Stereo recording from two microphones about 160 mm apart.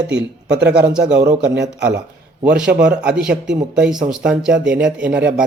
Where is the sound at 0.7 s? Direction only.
5° right (ahead or behind).